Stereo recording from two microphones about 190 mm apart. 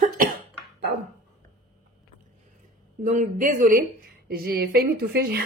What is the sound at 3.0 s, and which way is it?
Speech, 45° right (ahead or behind).